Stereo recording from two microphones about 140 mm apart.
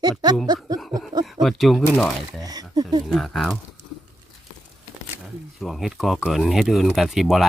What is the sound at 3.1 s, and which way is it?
Speech, centre (ahead or behind).